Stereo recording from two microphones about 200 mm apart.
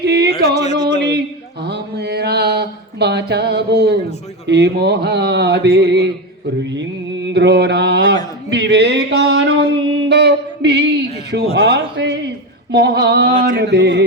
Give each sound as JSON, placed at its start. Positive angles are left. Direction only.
{"t": 0.0, "sound": "yodeling", "side_deg": -55}
{"t": 0.5, "sound": "speech", "side_deg": 35}
{"t": 1.6, "sound": "mantra", "side_deg": -55}
{"t": 4.4, "sound": "a sound", "side_deg": -60}
{"t": 7.3, "sound": "mantra", "side_deg": -55}
{"t": 8.4, "sound": "a sound", "side_deg": -60}